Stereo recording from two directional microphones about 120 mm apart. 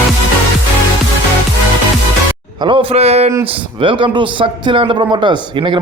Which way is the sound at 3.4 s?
45° right (ahead or behind).